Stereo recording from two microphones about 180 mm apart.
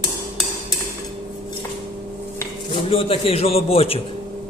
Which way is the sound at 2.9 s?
35° left (ahead or behind).